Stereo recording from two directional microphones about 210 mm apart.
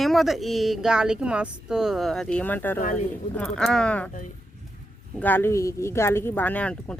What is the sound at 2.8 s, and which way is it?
Speech, 40° left (ahead or behind).